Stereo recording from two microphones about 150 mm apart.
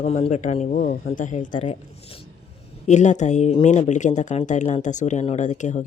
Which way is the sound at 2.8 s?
50° left (ahead or behind).